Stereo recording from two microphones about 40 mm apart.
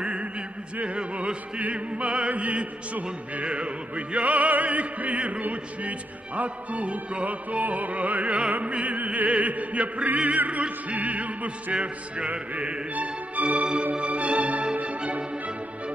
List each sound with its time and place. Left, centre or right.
0.0 s music: right